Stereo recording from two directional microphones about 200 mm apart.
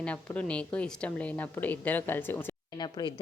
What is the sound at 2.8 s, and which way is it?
Speech, 20° left (ahead or behind).